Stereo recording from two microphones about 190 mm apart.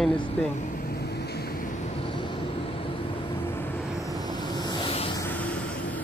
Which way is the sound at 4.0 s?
20° left (ahead or behind).